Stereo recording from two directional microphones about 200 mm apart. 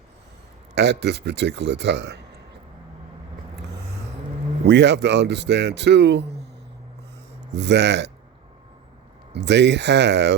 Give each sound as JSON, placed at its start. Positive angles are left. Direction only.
{"t": 0.8, "sound": "speech", "side_deg": -60}
{"t": 4.7, "sound": "speech", "side_deg": -60}
{"t": 7.5, "sound": "speech", "side_deg": -60}
{"t": 9.3, "sound": "speech", "side_deg": -60}